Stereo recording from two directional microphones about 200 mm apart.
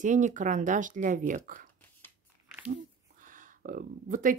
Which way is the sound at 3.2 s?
40° right (ahead or behind).